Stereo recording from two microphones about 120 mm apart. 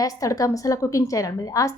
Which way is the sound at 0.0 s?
30° left (ahead or behind).